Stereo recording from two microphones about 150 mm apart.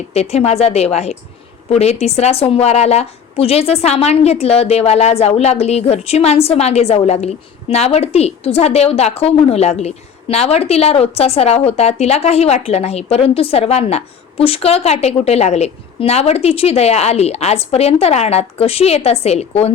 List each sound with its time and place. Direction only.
0.1 s a woman's voice: 45° left (ahead or behind)